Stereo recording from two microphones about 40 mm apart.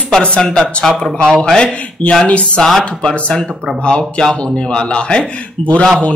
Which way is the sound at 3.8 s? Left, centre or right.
Left.